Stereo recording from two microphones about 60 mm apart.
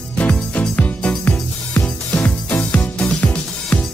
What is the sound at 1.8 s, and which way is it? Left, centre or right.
Music, centre.